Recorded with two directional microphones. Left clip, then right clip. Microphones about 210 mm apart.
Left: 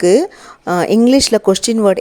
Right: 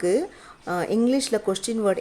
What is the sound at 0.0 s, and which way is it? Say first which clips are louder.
Speech: left 12 dB; 40° left (ahead or behind).